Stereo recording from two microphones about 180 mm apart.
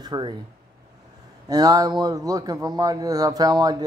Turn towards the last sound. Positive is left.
turn(degrees=-20)  # may be behind; listen again after turning